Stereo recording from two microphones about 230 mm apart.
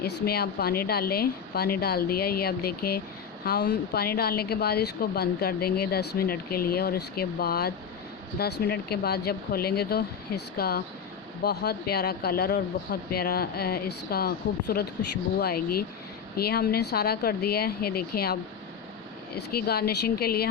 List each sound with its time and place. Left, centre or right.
0.0 s a woman's voice: left
19.4 s a woman's voice: left